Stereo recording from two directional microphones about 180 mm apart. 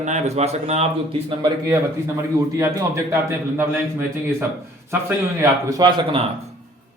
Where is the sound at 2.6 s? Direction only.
15° right (ahead or behind).